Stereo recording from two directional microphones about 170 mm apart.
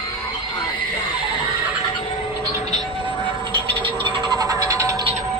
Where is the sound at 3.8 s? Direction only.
30° right (ahead or behind).